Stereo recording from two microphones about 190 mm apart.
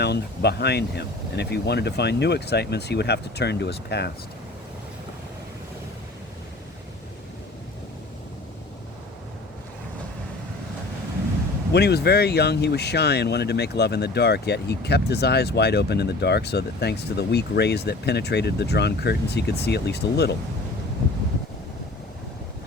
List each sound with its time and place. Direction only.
0.0 s speech: 60° left (ahead or behind)
11.7 s speech: 60° left (ahead or behind)